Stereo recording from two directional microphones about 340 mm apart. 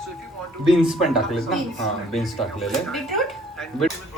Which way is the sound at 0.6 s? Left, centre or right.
Centre.